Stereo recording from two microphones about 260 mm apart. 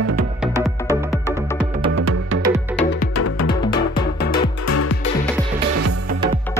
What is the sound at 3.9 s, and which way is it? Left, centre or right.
Music, centre.